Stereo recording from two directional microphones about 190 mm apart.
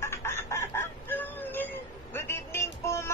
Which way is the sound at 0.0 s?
15° left (ahead or behind).